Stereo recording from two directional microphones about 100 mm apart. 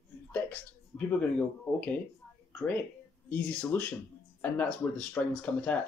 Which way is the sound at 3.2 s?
20° left (ahead or behind).